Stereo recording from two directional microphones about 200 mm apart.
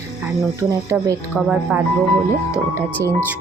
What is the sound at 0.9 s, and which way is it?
Speech, 15° right (ahead or behind).